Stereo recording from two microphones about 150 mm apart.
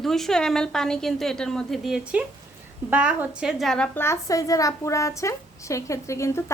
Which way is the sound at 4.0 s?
20° left (ahead or behind).